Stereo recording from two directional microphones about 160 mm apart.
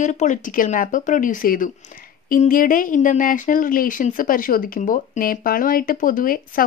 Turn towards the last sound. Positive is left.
turn(degrees=60)  # may be behind; listen again after turning